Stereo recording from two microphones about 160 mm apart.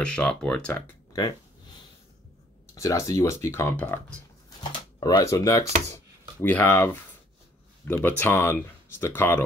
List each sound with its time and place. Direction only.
0.0 s speech: 5° left (ahead or behind)
1.1 s a sound: 25° left (ahead or behind)
2.7 s speech: 20° left (ahead or behind)
4.6 s speech: 25° left (ahead or behind)
6.4 s speech: 10° left (ahead or behind)